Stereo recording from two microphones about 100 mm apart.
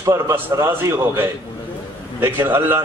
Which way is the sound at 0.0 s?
30° right (ahead or behind).